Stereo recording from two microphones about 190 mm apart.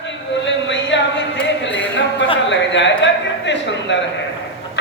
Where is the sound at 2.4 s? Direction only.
70° left (ahead or behind).